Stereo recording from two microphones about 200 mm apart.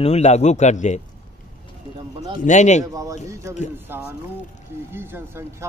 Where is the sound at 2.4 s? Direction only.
35° left (ahead or behind).